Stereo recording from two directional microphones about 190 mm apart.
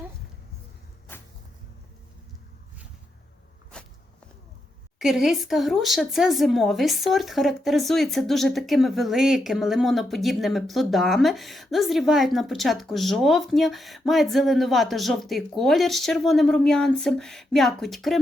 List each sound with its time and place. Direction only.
3.7 s walk: 5° left (ahead or behind)
4.9 s speech: centre (ahead or behind)